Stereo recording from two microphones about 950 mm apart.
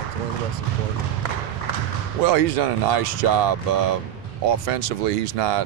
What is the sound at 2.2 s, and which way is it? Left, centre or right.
Speech, right.